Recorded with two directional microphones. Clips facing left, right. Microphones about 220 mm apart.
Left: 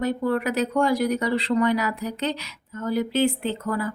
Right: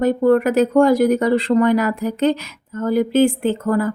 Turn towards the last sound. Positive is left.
turn(degrees=-50)  # may be behind; listen again after turning